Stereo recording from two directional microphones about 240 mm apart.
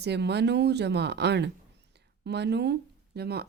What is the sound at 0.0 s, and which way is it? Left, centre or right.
Speech, right.